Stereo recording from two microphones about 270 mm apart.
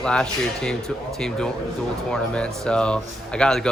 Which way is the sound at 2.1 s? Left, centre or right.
Centre.